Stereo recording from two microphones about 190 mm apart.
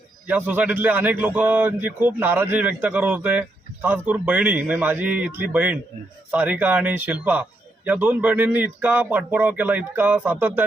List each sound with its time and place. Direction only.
0.3 s a man's voice: 10° right (ahead or behind)